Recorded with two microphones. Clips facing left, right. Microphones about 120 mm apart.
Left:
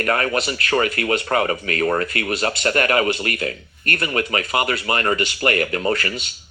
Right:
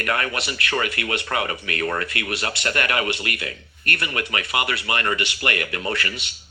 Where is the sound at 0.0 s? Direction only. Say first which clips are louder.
Left 5 dB; 40° left (ahead or behind).